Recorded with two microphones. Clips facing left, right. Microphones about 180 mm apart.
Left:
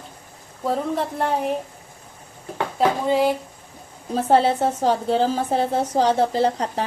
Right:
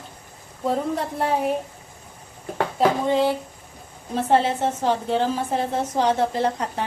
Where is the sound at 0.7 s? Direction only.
Centre (ahead or behind).